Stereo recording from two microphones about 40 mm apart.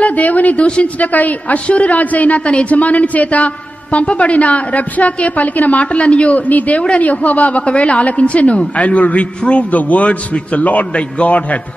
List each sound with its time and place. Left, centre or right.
0.0 s a woman's voice: left